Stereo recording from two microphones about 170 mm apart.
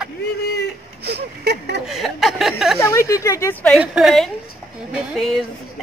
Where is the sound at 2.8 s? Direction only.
20° left (ahead or behind).